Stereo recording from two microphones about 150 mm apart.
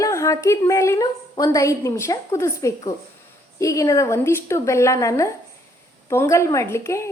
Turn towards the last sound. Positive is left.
turn(degrees=20)  # may be behind; listen again after turning